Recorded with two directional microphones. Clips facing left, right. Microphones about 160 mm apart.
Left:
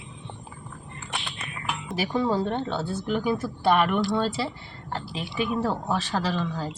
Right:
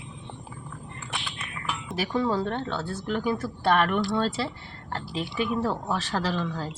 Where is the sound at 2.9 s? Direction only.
20° left (ahead or behind).